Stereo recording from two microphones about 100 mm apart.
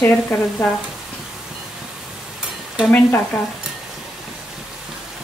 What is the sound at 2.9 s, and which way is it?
Speech, 20° left (ahead or behind).